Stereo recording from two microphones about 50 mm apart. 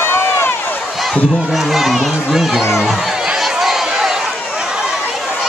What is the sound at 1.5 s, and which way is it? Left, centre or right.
Speech, centre.